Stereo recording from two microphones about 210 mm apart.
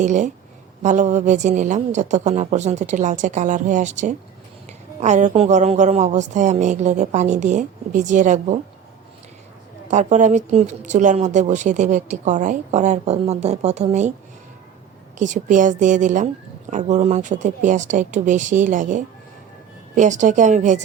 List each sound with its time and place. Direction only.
0.0 s speech: 35° right (ahead or behind)
9.9 s speech: 35° right (ahead or behind)
15.2 s speech: 35° right (ahead or behind)